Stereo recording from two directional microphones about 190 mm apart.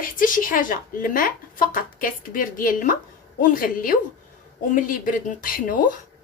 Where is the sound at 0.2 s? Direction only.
45° left (ahead or behind).